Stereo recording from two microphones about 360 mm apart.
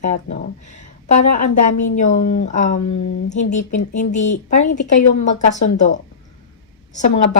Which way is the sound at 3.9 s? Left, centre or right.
Centre.